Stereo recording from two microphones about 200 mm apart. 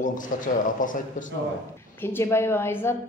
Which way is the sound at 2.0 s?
10° left (ahead or behind).